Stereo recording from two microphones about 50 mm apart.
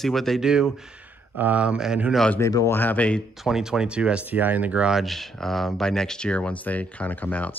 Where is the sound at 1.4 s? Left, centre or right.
Right.